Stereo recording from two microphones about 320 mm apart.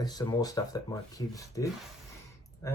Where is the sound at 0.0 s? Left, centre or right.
Centre.